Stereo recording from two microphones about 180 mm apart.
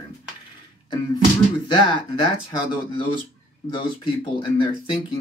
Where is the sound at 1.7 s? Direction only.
25° left (ahead or behind).